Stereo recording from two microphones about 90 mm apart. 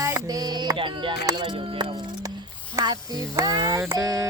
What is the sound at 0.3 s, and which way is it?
Music, 45° right (ahead or behind).